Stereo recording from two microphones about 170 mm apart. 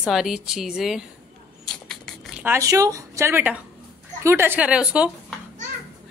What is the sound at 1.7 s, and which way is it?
Rodents, centre (ahead or behind).